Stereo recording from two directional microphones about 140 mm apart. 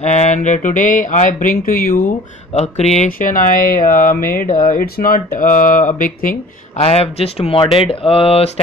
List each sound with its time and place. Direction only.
0.0 s speech: 55° left (ahead or behind); by 2.0 s 85° left
2.5 s speech: 50° left (ahead or behind)
3.1 s speech: 80° left
6.8 s speech: 45° left (ahead or behind)